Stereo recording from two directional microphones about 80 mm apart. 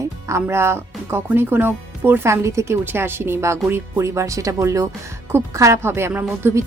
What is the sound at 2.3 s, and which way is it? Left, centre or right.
A woman's voice, right.